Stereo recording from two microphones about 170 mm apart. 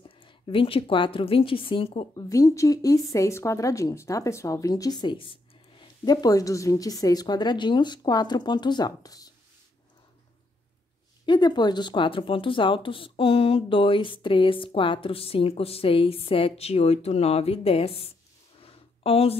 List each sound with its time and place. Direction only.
0.1 s a woman's voice: 30° left (ahead or behind)
2.1 s speech: 20° left (ahead or behind)
11.2 s speech: 25° left (ahead or behind)
18.6 s a sound: 35° left (ahead or behind)